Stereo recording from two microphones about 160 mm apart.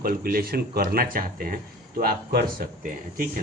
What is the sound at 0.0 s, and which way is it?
Speech, 65° right (ahead or behind).